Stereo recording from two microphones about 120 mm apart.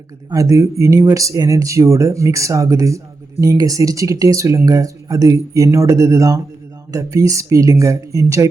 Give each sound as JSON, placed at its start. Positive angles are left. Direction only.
{"t": 0.3, "sound": "speech", "side_deg": -25}